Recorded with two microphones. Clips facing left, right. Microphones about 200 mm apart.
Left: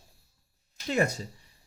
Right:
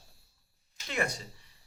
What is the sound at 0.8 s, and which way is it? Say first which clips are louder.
Speech: left 7 dB; 40° left (ahead or behind).